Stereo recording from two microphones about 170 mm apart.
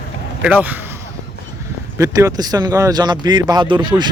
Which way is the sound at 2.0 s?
20° right (ahead or behind).